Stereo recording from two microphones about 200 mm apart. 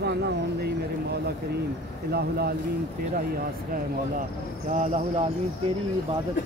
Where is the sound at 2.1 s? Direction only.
50° right (ahead or behind).